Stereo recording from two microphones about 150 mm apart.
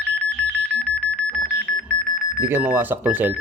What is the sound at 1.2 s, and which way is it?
Alarm, 10° left (ahead or behind).